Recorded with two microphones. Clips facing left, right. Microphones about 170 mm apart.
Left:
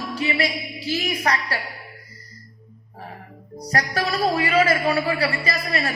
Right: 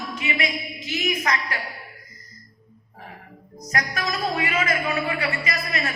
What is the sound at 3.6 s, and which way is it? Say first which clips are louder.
A woman's voice: left 4 dB; 35° left (ahead or behind).